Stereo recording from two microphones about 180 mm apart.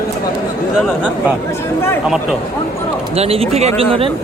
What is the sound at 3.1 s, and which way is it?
Speech, 35° right (ahead or behind).